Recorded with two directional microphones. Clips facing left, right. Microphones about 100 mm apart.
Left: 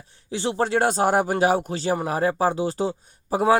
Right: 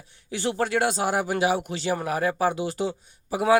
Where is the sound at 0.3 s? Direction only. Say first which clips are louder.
Left 2 dB; 30° left (ahead or behind).